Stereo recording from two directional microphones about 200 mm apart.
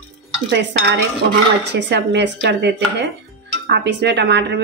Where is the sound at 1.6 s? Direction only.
60° right (ahead or behind).